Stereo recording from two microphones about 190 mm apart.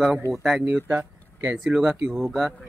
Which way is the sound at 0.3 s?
5° right (ahead or behind).